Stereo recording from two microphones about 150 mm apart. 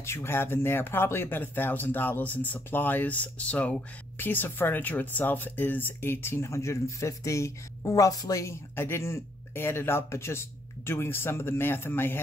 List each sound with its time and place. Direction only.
0.0 s speech: 15° left (ahead or behind)